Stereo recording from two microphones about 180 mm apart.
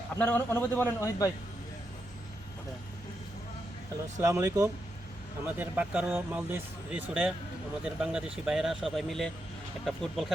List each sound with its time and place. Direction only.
0.2 s a man's voice: 10° left (ahead or behind)
4.2 s speech: 15° right (ahead or behind); by 10.3 s centre (ahead or behind)